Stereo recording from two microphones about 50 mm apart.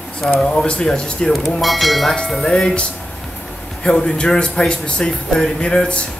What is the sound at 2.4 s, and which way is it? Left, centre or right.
Speech, centre.